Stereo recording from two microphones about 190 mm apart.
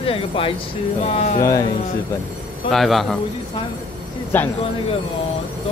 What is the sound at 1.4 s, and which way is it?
Speech, 15° left (ahead or behind).